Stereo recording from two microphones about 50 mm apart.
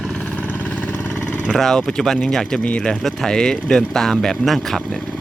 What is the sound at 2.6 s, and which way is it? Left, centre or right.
Speech, left.